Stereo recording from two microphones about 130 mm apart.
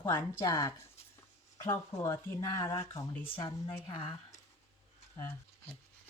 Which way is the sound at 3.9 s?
45° left (ahead or behind).